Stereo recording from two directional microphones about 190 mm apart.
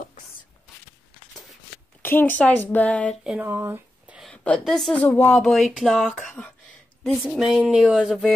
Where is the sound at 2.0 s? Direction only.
10° left (ahead or behind).